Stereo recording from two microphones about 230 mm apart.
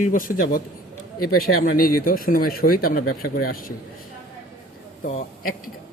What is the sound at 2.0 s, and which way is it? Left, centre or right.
Speech, left.